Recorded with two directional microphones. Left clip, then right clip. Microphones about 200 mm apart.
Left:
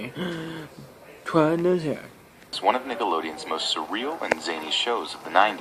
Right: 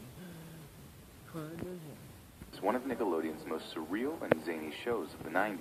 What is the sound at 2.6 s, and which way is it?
Speech, 30° right (ahead or behind).